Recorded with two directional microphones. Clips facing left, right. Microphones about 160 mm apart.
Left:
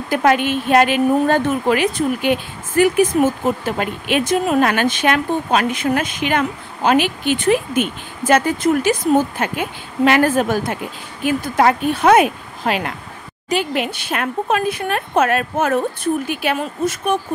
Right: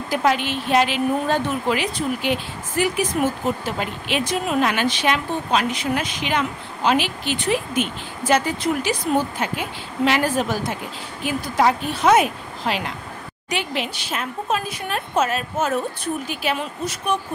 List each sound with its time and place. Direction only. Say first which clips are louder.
0.1 s a woman's voice: left 5 dB; 55° left (ahead or behind)